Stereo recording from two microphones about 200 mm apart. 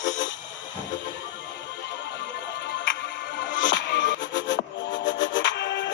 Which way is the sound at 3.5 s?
65° left (ahead or behind).